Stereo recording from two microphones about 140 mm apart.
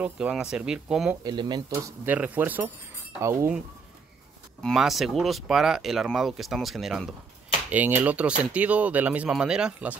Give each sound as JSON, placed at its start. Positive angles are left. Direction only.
{"t": 0.0, "sound": "speech", "side_deg": -5}
{"t": 1.2, "sound": "speech", "side_deg": -30}
{"t": 1.7, "sound": "speech", "side_deg": -20}
{"t": 4.6, "sound": "speech", "side_deg": 0}
{"t": 7.7, "sound": "speech", "side_deg": -10}